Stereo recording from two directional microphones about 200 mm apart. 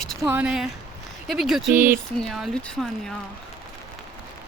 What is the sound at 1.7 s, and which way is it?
Speech, 40° right (ahead or behind).